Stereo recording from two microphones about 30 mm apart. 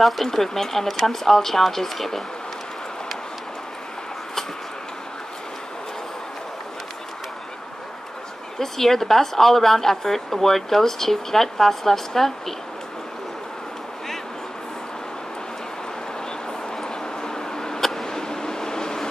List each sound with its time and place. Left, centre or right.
0.0 s a woman's voice: centre
8.5 s a woman's voice: centre
16.8 s vehicle: left